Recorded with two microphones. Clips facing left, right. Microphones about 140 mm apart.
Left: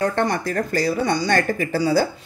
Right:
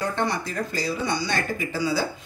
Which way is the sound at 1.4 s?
65° left (ahead or behind).